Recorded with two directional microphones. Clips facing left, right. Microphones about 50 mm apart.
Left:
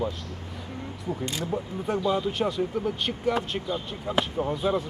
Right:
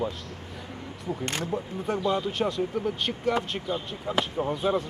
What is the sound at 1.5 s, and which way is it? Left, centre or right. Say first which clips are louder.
Speech: left 3 dB; centre.